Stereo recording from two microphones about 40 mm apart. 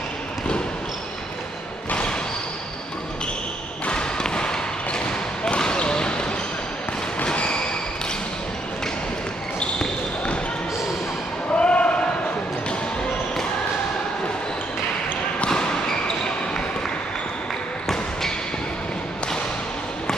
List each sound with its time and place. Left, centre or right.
1.9 s a sound: left
3.8 s basketball bounce: left
7.3 s basketball bounce: left
11.5 s basketball bounce: left
15.4 s basketball bounce: left